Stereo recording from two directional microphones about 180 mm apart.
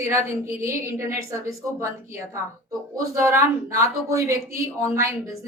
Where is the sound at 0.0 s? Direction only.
15° right (ahead or behind).